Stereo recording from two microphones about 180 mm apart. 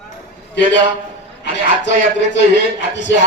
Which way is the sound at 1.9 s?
80° left.